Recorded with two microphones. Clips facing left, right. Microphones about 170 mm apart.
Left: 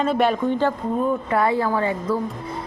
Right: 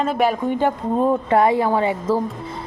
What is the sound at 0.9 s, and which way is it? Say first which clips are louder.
Speech: right 7 dB; 25° right (ahead or behind).